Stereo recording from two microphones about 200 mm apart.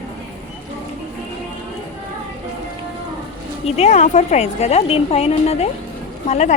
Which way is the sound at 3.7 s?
35° left (ahead or behind).